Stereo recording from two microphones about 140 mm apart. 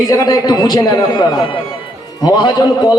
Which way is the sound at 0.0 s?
25° left (ahead or behind).